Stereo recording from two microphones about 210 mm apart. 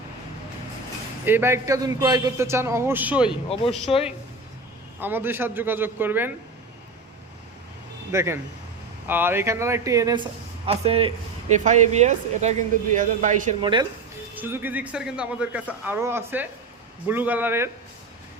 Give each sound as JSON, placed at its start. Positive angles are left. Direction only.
{"t": 1.2, "sound": "a man's voice", "side_deg": -10}
{"t": 3.5, "sound": "speech", "side_deg": 25}
{"t": 4.9, "sound": "a man's voice", "side_deg": -10}
{"t": 8.1, "sound": "a man's voice", "side_deg": -10}
{"t": 10.7, "sound": "speech", "side_deg": -30}
{"t": 13.6, "sound": "speech", "side_deg": -25}
{"t": 14.3, "sound": "a man's voice", "side_deg": -10}